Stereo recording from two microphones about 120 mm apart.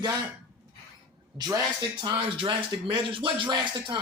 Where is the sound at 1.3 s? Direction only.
30° right (ahead or behind).